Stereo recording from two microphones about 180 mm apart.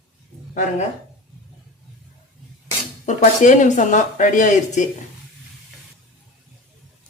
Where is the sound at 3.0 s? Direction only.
45° left (ahead or behind).